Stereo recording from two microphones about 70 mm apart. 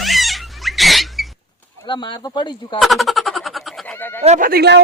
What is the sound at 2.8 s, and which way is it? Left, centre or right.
Speech, centre.